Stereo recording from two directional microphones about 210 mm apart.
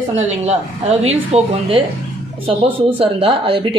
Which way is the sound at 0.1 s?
30° right (ahead or behind).